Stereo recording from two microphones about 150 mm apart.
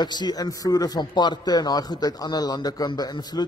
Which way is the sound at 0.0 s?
30° left (ahead or behind).